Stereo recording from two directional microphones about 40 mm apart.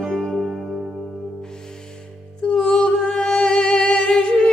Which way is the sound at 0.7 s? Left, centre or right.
Right.